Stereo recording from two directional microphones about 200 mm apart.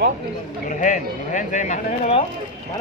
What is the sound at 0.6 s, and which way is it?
Speech, 40° left (ahead or behind).